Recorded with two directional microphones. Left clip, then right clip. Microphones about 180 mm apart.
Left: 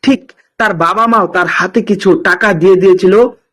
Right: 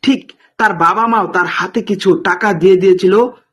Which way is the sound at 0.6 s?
Centre (ahead or behind).